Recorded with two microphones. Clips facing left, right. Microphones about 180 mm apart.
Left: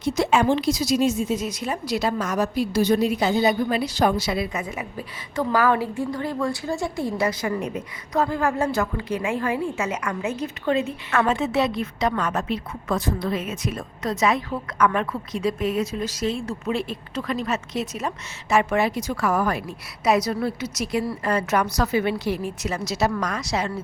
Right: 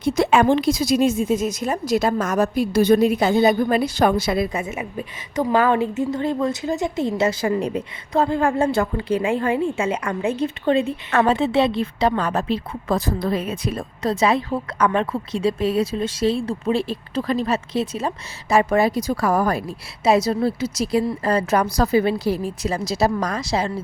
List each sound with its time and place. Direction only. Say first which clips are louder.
0.0 s a woman's voice: right 3 dB; 55° right (ahead or behind)
4.5 s a woman's voice: right 3 dB; 25° right (ahead or behind)